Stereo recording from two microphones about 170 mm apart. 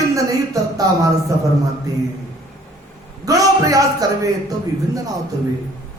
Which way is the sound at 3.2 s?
20° right (ahead or behind).